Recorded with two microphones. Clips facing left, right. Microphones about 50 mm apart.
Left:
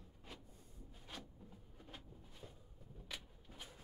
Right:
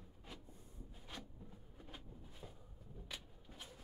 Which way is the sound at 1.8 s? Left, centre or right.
Centre.